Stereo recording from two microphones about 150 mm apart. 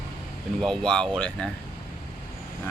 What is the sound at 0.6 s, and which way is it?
Speech, 5° left (ahead or behind).